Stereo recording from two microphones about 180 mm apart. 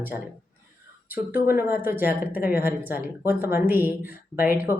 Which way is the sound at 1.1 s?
10° right (ahead or behind).